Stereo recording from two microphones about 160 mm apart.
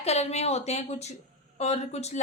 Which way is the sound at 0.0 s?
40° left (ahead or behind).